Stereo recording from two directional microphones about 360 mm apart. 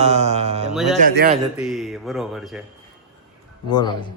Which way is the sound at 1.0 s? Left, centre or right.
Right.